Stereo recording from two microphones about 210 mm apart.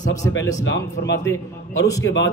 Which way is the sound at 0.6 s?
60° left (ahead or behind).